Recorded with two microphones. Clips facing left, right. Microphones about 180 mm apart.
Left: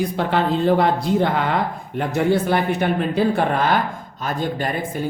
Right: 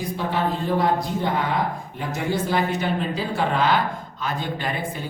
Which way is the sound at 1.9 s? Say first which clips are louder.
Left 8 dB; 60° left (ahead or behind).